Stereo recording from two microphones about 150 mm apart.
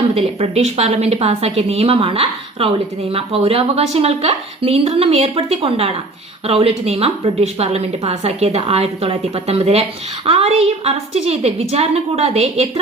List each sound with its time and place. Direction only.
0.1 s a woman's voice: 40° right (ahead or behind)